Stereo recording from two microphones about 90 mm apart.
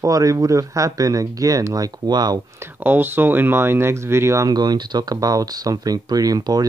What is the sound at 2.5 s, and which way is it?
Speech, 25° right (ahead or behind).